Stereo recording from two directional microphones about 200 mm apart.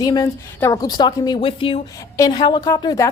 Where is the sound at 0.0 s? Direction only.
20° left (ahead or behind).